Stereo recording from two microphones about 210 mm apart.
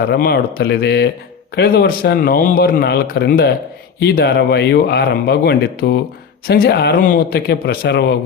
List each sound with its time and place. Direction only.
0.1 s a man's voice: 50° left (ahead or behind)